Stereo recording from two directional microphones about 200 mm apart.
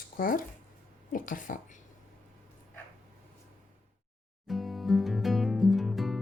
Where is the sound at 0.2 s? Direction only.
45° left (ahead or behind).